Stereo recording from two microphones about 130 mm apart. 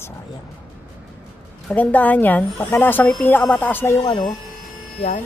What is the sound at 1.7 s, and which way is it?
Speech, 10° left (ahead or behind).